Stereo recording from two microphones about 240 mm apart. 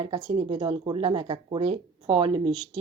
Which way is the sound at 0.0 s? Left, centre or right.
Right.